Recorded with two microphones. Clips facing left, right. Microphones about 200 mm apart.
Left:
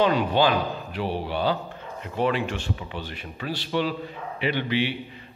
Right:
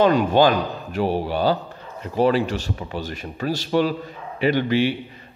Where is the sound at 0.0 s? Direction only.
45° right (ahead or behind).